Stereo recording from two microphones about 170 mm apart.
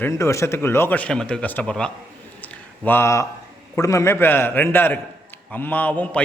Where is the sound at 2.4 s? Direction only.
10° left (ahead or behind).